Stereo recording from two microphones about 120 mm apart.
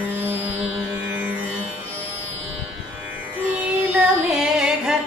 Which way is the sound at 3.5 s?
10° right (ahead or behind).